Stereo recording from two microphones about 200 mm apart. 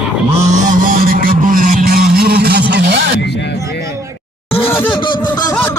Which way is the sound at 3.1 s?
60° left (ahead or behind).